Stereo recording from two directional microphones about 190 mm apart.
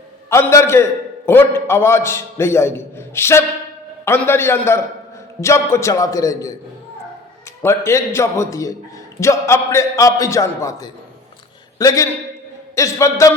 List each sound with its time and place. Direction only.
0.3 s a man's voice: 15° left (ahead or behind)
7.6 s a man's voice: 15° left (ahead or behind)